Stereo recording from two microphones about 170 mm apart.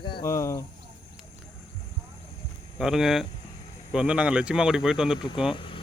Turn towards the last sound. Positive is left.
turn(degrees=30)  # may be behind; listen again after turning